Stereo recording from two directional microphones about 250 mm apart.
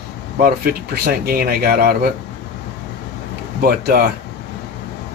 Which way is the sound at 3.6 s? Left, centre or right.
Right.